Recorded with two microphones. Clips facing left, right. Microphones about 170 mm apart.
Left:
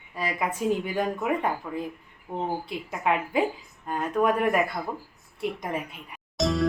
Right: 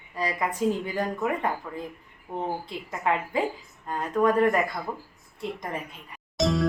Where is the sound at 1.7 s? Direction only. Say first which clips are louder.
Left 4 dB; 10° left (ahead or behind).